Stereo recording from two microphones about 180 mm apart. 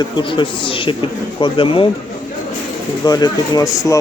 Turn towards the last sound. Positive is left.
turn(degrees=20)  # may be behind; listen again after turning